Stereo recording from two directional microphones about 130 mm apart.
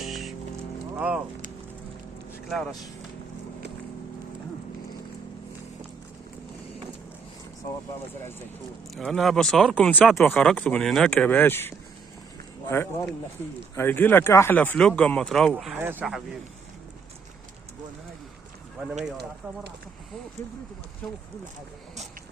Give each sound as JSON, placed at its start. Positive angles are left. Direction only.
{"t": 0.0, "sound": "music", "side_deg": 0}
{"t": 0.9, "sound": "speech", "side_deg": -10}
{"t": 2.5, "sound": "speech", "side_deg": 5}
{"t": 9.0, "sound": "speech", "side_deg": 0}
{"t": 15.8, "sound": "speech", "side_deg": -15}